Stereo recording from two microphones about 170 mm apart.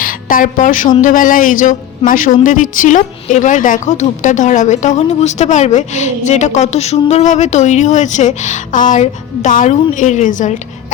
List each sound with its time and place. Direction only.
0.0 s a woman's voice: 55° left (ahead or behind)